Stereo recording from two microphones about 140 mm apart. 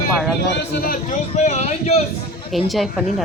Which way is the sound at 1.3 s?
55° left (ahead or behind).